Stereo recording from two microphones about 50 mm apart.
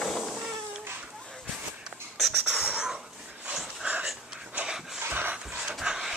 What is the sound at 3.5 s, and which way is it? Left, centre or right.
Dog, centre.